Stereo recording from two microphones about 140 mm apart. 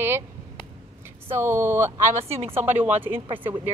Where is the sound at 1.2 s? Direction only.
15° right (ahead or behind).